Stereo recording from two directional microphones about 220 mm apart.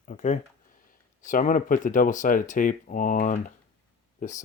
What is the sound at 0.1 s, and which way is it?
Speech, 35° left (ahead or behind).